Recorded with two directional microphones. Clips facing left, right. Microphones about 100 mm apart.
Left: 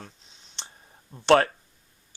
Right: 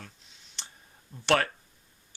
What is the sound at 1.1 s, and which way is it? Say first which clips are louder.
Speech: left 7 dB; 30° left (ahead or behind).